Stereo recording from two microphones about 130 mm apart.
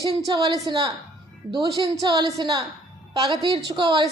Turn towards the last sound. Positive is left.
turn(degrees=-35)  # may be behind; listen again after turning